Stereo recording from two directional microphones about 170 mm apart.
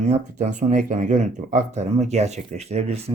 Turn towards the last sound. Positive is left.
turn(degrees=-35)  # may be behind; listen again after turning